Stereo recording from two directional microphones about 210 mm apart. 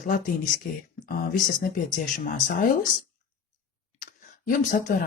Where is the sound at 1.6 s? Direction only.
45° left (ahead or behind).